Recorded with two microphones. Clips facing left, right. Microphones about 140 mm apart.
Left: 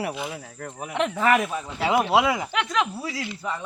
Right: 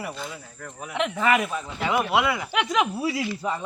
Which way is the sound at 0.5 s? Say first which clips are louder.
Left 3 dB; 45° left (ahead or behind).